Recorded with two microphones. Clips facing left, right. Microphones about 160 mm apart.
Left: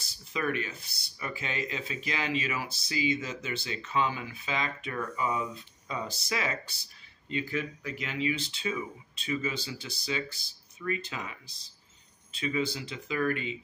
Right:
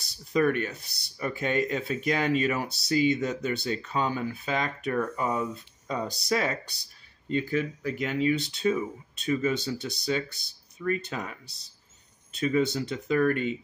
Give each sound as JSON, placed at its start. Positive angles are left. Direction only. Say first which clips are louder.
{"t": 0.3, "sound": "speech", "louder": "right 7 dB", "side_deg": -45}
{"t": 12.4, "sound": "speech", "louder": "right 6 dB", "side_deg": -45}